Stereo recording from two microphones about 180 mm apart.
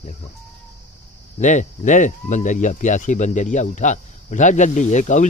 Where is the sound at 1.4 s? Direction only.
45° left (ahead or behind).